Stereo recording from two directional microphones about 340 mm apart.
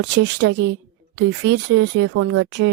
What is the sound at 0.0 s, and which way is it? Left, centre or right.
Speech, right.